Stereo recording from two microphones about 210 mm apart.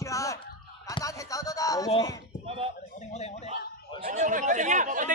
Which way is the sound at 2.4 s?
30° right (ahead or behind).